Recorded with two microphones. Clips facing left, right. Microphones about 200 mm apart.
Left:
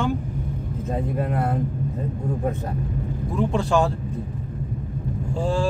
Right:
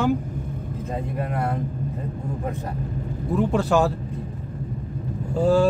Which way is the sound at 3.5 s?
5° right (ahead or behind).